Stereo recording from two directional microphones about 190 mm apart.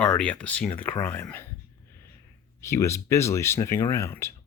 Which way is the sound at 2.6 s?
15° left (ahead or behind).